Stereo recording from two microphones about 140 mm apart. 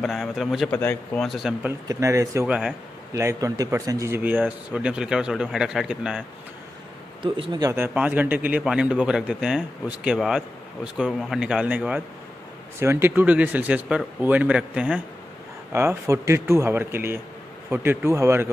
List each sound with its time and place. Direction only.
0.0 s a man's voice: centre (ahead or behind)
0.7 s speech: 10° left (ahead or behind)
1.6 s speech: 20° right (ahead or behind)
2.4 s a man's voice: 10° right (ahead or behind)
3.1 s a man's voice: 20° right (ahead or behind); by 6.2 s 5° right (ahead or behind)
7.2 s speech: 40° right (ahead or behind)
7.6 s a man's voice: 15° right (ahead or behind)